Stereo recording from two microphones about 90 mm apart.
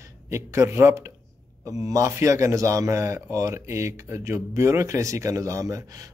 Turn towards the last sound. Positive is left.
turn(degrees=-40)  # may be behind; listen again after turning